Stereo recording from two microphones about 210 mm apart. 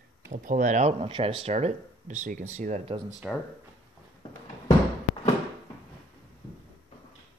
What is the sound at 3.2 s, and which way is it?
Speech, 5° right (ahead or behind).